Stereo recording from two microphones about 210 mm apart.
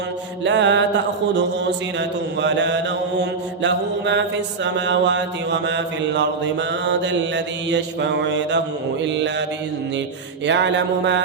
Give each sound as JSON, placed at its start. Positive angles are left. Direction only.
{"t": 0.4, "sound": "mantra", "side_deg": -60}
{"t": 10.4, "sound": "mantra", "side_deg": -60}